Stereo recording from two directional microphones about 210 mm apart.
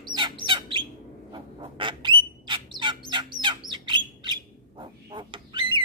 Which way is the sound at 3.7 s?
20° right (ahead or behind).